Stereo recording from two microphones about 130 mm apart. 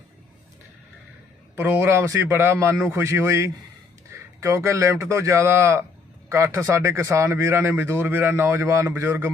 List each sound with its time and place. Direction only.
1.5 s speech: 20° right (ahead or behind)